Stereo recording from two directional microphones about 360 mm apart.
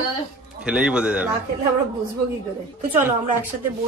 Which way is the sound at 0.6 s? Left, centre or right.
Centre.